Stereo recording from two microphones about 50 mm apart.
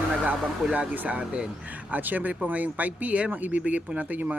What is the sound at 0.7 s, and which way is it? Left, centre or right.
Speech, right.